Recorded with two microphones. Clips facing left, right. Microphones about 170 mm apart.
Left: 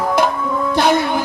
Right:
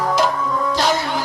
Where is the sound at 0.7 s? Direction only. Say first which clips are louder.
Left 7 dB; 55° left (ahead or behind).